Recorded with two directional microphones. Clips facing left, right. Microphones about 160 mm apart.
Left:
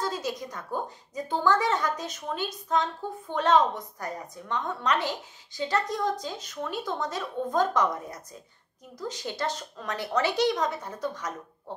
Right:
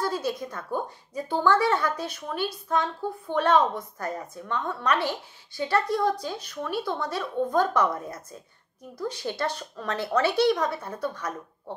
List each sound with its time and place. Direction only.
0.0 s a woman's voice: 15° left (ahead or behind)